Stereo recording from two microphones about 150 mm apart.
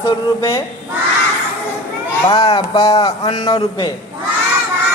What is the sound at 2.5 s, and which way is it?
A man's voice, 35° left (ahead or behind).